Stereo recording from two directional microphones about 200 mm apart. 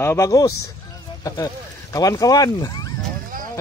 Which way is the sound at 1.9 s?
15° left (ahead or behind).